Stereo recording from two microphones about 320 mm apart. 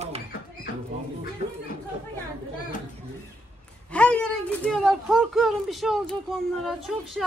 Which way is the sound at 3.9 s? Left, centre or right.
Centre.